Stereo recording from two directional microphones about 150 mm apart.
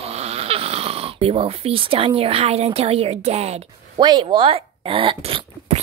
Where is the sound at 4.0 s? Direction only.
30° right (ahead or behind).